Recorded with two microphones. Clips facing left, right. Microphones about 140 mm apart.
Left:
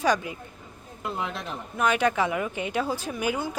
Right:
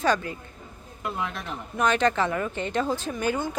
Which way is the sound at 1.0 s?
25° left (ahead or behind).